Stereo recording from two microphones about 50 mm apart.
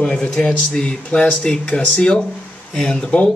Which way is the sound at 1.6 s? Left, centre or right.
Left.